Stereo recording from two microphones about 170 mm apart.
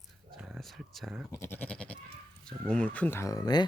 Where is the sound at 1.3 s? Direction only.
15° left (ahead or behind).